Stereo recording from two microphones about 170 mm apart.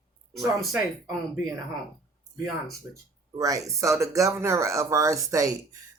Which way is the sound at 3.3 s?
20° right (ahead or behind).